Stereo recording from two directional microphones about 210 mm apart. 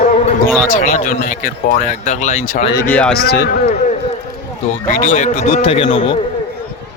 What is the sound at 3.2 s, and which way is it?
Speech, 50° left (ahead or behind).